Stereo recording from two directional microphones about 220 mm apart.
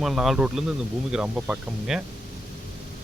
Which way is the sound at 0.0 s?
Centre (ahead or behind).